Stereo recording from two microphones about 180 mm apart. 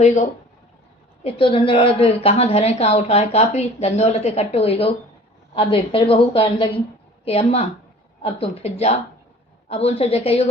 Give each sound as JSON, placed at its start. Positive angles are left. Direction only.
{"t": 1.2, "sound": "a woman's voice", "side_deg": 30}